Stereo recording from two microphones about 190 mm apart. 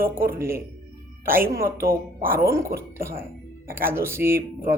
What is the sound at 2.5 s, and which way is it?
Speech, 15° right (ahead or behind).